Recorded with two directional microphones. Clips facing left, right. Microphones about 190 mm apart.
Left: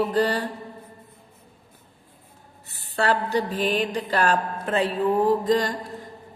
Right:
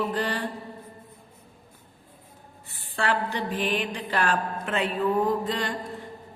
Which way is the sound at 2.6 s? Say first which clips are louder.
Left 4 dB; 40° left (ahead or behind).